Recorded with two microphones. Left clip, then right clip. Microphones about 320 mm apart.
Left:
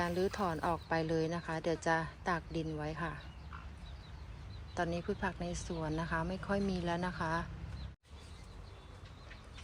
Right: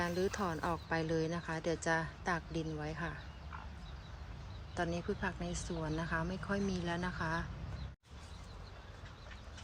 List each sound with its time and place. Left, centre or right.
0.0 s speech: centre
4.7 s speech: centre